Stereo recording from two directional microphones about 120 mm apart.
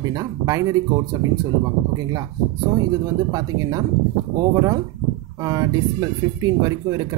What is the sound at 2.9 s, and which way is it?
Speech, 30° right (ahead or behind).